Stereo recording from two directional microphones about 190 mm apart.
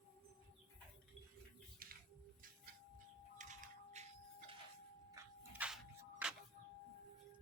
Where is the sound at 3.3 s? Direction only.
40° right (ahead or behind).